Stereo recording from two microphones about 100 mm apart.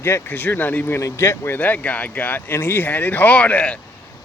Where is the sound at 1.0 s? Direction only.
30° left (ahead or behind).